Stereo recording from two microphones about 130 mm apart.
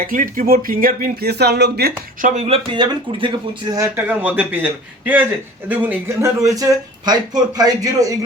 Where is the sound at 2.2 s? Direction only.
65° right (ahead or behind); by 3.3 s 40° right (ahead or behind).